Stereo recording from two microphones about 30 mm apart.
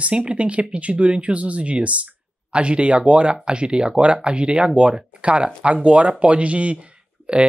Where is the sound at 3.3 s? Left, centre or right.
Right.